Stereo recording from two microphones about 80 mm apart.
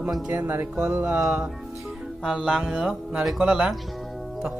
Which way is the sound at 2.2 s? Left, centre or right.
Centre.